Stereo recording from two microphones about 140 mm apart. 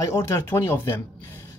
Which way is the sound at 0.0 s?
20° left (ahead or behind).